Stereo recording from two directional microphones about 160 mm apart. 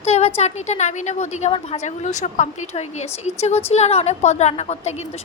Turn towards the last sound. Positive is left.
turn(degrees=45)  # may be behind; listen again after turning